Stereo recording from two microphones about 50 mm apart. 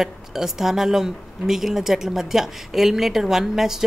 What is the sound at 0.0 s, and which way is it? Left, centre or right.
Speech, centre.